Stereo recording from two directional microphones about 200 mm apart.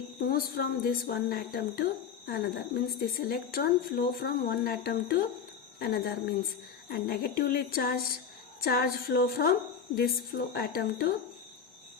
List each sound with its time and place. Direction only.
0.2 s a woman's voice: 45° left (ahead or behind)